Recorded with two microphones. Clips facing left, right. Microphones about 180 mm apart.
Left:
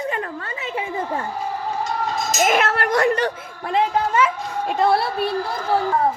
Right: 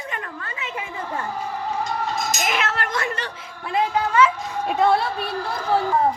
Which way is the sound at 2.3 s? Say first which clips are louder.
Left 6 dB; 45° left (ahead or behind).